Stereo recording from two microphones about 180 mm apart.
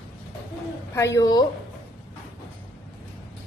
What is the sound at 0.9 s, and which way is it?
Speech, 15° left (ahead or behind).